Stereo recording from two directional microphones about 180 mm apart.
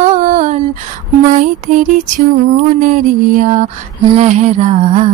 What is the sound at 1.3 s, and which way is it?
Music, 45° right (ahead or behind).